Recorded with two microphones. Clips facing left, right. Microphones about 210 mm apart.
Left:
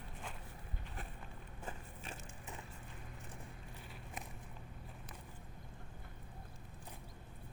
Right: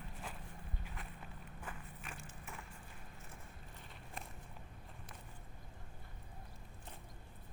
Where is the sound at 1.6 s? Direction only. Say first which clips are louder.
Left 3 dB; 25° left (ahead or behind).